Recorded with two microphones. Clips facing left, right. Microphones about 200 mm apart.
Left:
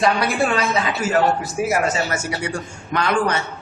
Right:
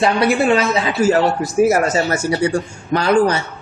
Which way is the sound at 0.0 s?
25° right (ahead or behind).